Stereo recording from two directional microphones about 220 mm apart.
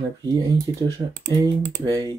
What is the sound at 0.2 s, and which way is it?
Speech, 15° right (ahead or behind).